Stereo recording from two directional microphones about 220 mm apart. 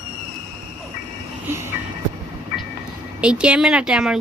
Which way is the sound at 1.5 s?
10° right (ahead or behind).